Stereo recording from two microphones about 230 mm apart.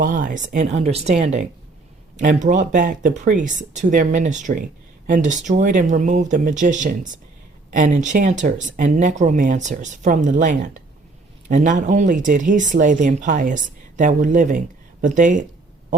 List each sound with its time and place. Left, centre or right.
0.0 s speech: right